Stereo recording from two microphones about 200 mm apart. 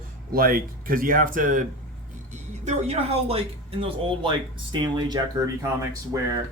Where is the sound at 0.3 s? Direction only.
45° right (ahead or behind); by 5.2 s 20° right (ahead or behind).